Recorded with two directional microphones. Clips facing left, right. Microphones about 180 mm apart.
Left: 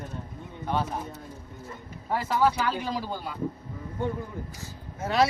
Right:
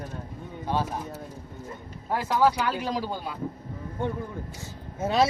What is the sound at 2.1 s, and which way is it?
Speech, centre (ahead or behind).